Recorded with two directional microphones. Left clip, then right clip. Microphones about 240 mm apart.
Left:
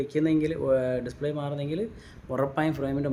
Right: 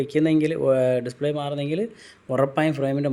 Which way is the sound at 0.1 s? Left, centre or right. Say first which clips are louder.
Right 5 dB; centre.